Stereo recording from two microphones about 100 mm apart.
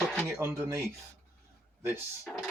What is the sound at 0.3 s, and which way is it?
Speech, 25° right (ahead or behind).